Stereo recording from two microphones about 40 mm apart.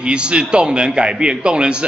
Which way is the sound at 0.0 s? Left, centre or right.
Right.